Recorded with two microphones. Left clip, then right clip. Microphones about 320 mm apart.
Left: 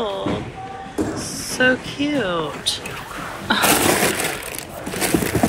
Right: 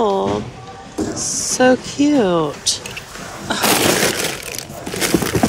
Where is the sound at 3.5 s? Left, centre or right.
Centre.